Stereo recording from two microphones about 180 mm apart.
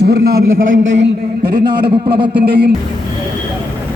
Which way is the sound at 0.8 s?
90° right.